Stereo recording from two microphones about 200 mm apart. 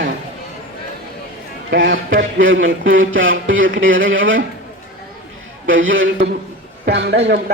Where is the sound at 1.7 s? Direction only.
60° right (ahead or behind); by 4.4 s 75° right (ahead or behind).